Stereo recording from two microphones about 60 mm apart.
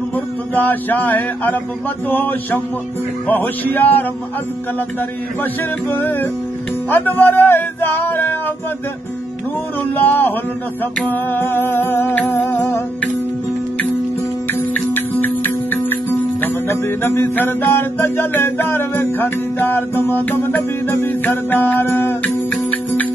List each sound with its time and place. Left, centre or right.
0.1 s speech: left
5.9 s speech: left
9.9 s speech: left
12.2 s music: left
14.5 s music: left
22.7 s music: left